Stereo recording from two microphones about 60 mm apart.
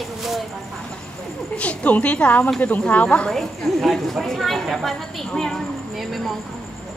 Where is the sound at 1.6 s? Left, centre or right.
Left.